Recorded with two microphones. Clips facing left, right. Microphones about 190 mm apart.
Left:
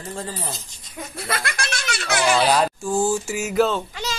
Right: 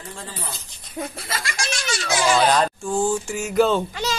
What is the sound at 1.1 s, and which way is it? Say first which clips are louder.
Speech: left 3 dB; 60° left (ahead or behind).